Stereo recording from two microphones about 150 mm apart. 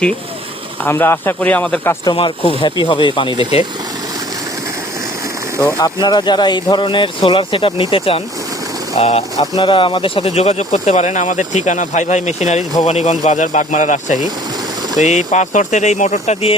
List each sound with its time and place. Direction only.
0.9 s speech: 15° left (ahead or behind)
2.1 s speech: 40° left (ahead or behind)
5.8 s speech: 30° left (ahead or behind); by 16.6 s 45° left (ahead or behind)